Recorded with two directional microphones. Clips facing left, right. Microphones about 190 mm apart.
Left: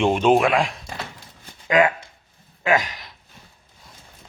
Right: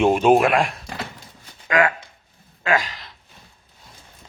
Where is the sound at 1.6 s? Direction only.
20° left (ahead or behind).